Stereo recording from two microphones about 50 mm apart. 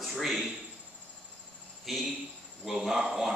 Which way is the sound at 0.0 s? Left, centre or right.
Centre.